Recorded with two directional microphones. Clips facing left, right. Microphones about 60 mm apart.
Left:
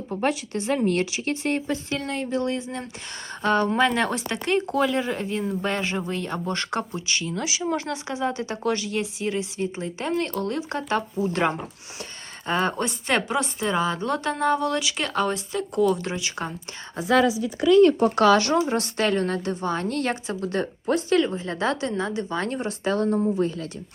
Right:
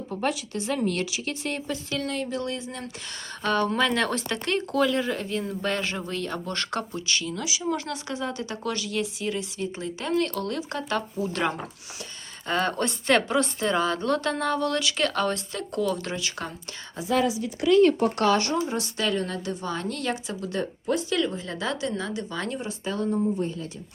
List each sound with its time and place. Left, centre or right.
0.1 s speech: left
7.3 s speech: left
7.6 s speech: left
18.3 s a woman's voice: left
21.2 s speech: left
22.6 s speech: left
23.4 s speech: left